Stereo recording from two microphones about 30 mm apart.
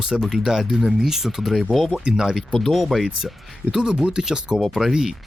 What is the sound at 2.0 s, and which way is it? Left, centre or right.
Speech, right.